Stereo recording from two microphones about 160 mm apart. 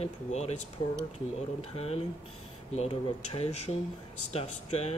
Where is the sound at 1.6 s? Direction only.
40° left (ahead or behind).